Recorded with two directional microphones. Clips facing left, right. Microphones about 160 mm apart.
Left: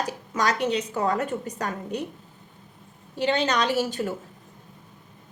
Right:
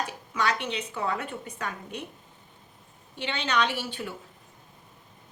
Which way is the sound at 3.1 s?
40° left (ahead or behind).